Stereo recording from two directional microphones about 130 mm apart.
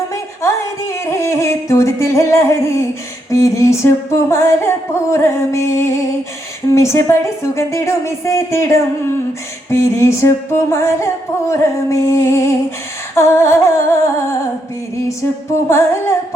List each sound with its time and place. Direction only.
0.4 s singing: 20° left (ahead or behind)
3.2 s music: 25° left (ahead or behind)
15.7 s music: 20° left (ahead or behind)